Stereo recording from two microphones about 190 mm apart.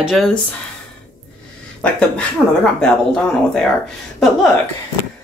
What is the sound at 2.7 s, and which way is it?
Speech, 5° left (ahead or behind).